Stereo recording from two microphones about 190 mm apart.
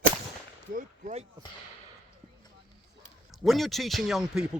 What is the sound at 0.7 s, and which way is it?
Speech, 45° right (ahead or behind).